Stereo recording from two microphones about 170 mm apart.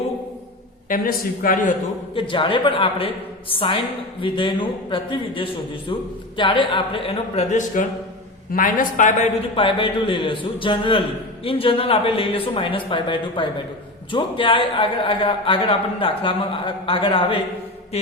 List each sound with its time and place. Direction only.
0.9 s a man's voice: 55° left (ahead or behind)
2.1 s a man's voice: 30° left (ahead or behind)
7.8 s a man's voice: 50° left (ahead or behind)
9.6 s a man's voice: 30° left (ahead or behind)